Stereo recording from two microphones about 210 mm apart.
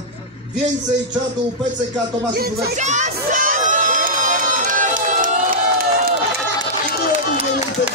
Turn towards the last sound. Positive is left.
turn(degrees=-40)  # may be behind; listen again after turning